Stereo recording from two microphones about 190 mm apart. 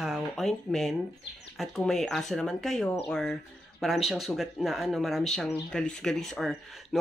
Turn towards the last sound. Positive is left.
turn(degrees=0)  # may be behind; listen again after turning